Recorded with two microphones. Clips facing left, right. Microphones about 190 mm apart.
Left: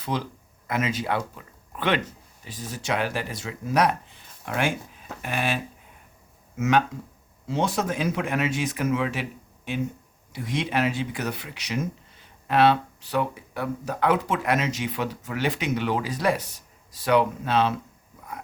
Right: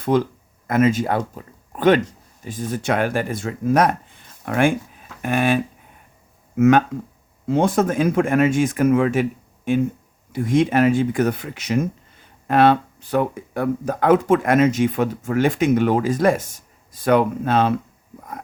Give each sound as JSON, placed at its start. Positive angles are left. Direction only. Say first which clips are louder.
{"t": 0.0, "sound": "speech", "louder": "right 10 dB", "side_deg": -50}
{"t": 6.6, "sound": "speech", "louder": "right 8 dB", "side_deg": -50}